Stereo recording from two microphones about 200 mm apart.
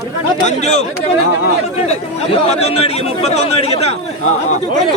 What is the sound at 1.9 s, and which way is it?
Speech, 30° left (ahead or behind).